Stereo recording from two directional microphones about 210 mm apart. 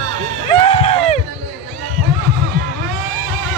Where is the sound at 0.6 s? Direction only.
30° left (ahead or behind).